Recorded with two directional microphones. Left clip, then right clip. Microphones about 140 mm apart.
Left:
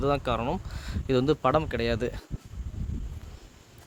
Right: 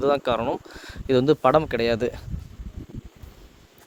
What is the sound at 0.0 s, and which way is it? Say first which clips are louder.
Speech: right 5 dB; 30° right (ahead or behind).